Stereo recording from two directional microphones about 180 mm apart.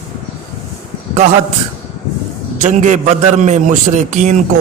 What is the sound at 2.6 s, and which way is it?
Speech, 45° right (ahead or behind).